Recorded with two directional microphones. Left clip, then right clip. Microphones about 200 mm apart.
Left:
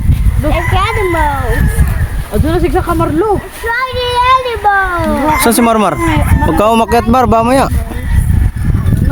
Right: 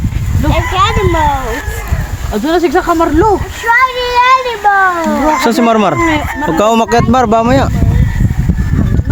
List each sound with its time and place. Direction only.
0.5 s a sound: 15° right (ahead or behind)
2.5 s speech: 55° right (ahead or behind)
3.7 s a child's voice: 25° right (ahead or behind)
5.4 s speech: 15° left (ahead or behind)